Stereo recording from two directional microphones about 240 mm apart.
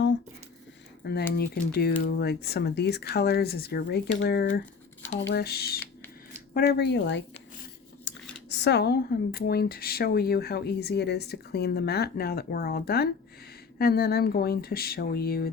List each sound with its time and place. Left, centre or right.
1.3 s speech: left
8.1 s a sound: left
8.4 s speech: left